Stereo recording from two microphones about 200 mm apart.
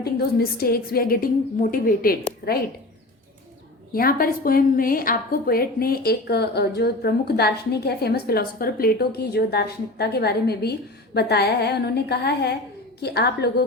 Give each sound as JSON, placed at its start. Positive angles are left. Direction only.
{"t": 0.0, "sound": "a woman's voice", "side_deg": 50}
{"t": 3.9, "sound": "a woman's voice", "side_deg": 45}